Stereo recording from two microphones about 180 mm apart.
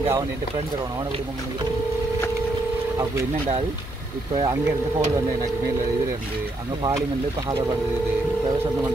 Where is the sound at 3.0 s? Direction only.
20° right (ahead or behind).